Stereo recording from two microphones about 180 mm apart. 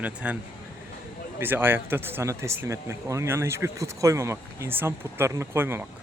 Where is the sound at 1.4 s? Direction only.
10° right (ahead or behind).